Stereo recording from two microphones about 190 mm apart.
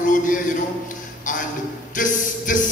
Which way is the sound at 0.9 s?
45° left (ahead or behind).